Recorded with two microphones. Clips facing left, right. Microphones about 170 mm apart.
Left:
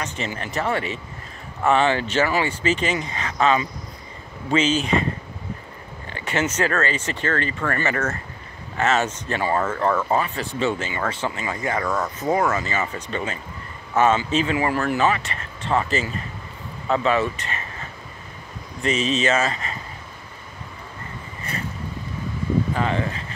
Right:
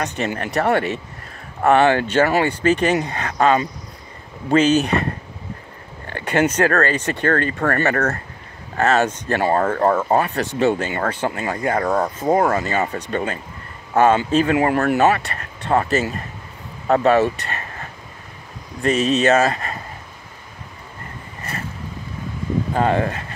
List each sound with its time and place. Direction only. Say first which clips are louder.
0.0 s speech: right 5 dB; 60° right (ahead or behind)
6.0 s speech: right 6 dB; 55° right (ahead or behind)
7.8 s speech: right 5 dB; 60° right (ahead or behind)
9.5 s speech: right 4 dB; 40° right (ahead or behind)
10.1 s speech: right 4 dB; 60° right (ahead or behind)
10.7 s speech: right 5 dB; 55° right (ahead or behind)
18.8 s speech: right 5 dB; 45° right (ahead or behind)
22.8 s speech: right 5 dB; 50° right (ahead or behind)